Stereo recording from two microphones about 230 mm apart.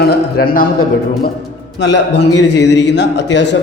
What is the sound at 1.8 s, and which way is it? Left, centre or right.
A man's voice, left.